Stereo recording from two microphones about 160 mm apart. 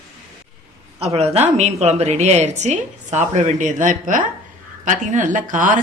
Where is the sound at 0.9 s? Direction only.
40° right (ahead or behind).